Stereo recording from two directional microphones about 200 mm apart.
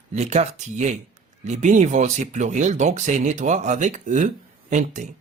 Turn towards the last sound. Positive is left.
turn(degrees=-35)  # may be behind; listen again after turning